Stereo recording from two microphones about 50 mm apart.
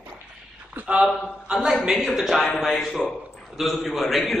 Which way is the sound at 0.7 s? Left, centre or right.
Right.